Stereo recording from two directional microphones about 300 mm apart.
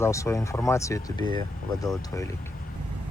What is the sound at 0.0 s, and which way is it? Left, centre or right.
Speech, centre.